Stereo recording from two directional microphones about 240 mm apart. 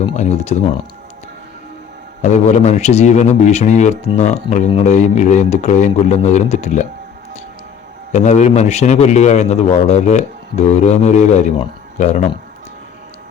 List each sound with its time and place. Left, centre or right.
0.0 s a man's voice: left
2.2 s a man's voice: left
8.1 s a man's voice: left